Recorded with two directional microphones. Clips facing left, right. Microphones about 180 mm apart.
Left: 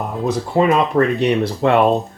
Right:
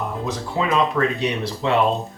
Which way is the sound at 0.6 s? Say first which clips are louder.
Left 5 dB; 55° left (ahead or behind).